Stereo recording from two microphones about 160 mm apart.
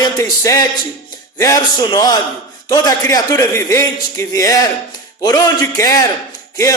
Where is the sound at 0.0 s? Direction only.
20° left (ahead or behind).